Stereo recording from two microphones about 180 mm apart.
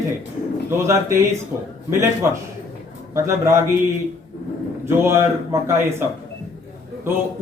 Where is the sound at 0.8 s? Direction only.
15° right (ahead or behind).